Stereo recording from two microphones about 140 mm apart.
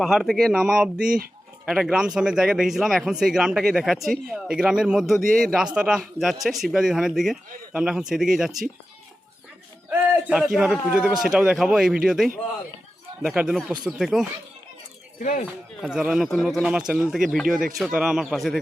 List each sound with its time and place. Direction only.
0.0 s speech: 5° right (ahead or behind)
9.9 s a man's voice: 10° right (ahead or behind)
15.2 s speech: 65° left (ahead or behind)
15.8 s speech: 5° right (ahead or behind)